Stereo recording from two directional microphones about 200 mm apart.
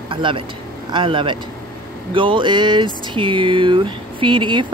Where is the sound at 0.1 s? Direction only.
25° right (ahead or behind).